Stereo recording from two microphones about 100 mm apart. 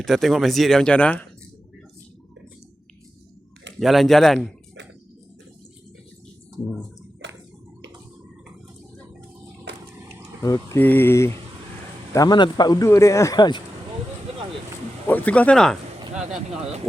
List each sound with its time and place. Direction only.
0.0 s speech: centre (ahead or behind)
3.8 s speech: centre (ahead or behind)
10.4 s speech: 35° left (ahead or behind)
10.8 s speech: 20° left (ahead or behind)
12.1 s speech: 40° left (ahead or behind)
12.8 s speech: 30° left (ahead or behind)
15.0 s speech: 15° left (ahead or behind)